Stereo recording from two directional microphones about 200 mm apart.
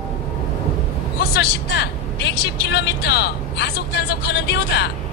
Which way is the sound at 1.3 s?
55° left (ahead or behind).